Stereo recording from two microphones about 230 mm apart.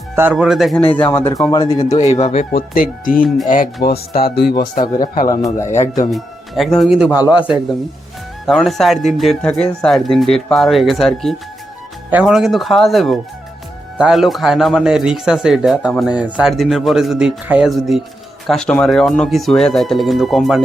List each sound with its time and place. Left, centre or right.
0.2 s a man's voice: centre; by 5.3 s left
6.1 s a man's voice: centre